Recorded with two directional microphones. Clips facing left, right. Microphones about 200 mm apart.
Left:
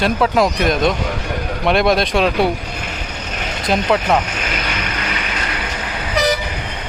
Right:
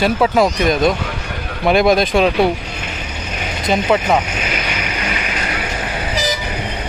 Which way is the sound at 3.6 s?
Centre (ahead or behind).